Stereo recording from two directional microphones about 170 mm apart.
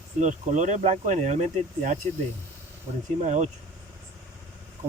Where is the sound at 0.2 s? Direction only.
45° right (ahead or behind).